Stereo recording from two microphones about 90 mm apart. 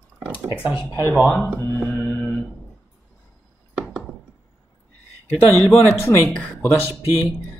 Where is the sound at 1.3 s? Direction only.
5° left (ahead or behind).